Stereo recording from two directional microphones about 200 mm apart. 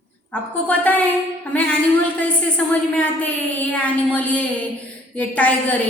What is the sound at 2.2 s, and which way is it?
A woman's voice, 5° left (ahead or behind).